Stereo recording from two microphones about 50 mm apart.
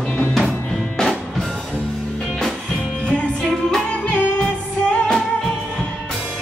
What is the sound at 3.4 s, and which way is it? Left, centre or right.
Music, centre.